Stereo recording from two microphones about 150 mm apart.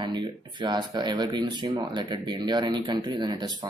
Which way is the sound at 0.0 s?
30° right (ahead or behind).